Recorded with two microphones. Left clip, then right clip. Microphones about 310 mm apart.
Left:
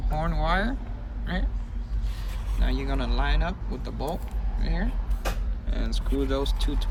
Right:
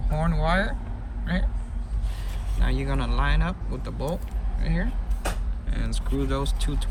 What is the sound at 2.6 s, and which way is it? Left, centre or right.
Speech, centre.